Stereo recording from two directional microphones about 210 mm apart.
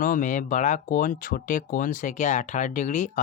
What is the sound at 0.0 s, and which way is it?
Speech, 40° left (ahead or behind).